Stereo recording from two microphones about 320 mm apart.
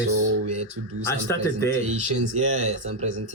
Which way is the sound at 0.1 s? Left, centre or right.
Right.